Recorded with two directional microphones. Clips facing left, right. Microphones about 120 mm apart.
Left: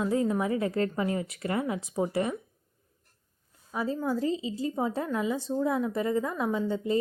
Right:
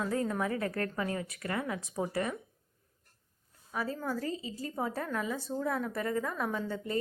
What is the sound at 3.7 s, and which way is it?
A woman's voice, 20° left (ahead or behind).